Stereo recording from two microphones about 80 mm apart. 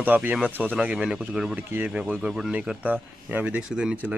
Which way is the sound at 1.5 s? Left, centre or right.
Centre.